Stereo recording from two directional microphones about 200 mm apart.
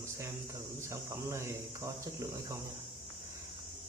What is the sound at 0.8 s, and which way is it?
Speech, 15° right (ahead or behind).